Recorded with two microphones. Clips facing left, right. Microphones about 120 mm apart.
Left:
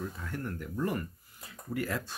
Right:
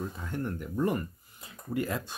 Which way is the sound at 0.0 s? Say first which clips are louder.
Right 3 dB; 20° right (ahead or behind).